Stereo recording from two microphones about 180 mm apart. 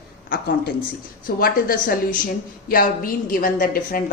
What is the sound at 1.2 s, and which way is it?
A woman's voice, 50° left (ahead or behind).